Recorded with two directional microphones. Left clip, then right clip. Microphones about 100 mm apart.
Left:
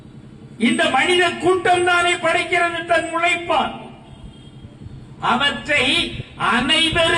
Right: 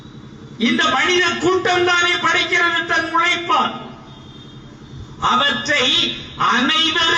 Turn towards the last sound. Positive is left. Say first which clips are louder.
# right 1 dB
turn(degrees=40)  # may be behind; listen again after turning